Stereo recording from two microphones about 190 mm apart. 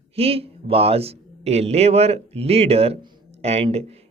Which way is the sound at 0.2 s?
30° right (ahead or behind).